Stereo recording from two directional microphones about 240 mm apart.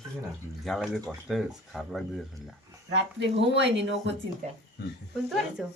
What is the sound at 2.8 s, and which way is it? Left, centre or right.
Speech, right.